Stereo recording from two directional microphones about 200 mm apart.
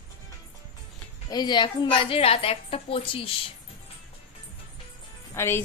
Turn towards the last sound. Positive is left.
turn(degrees=10)  # may be behind; listen again after turning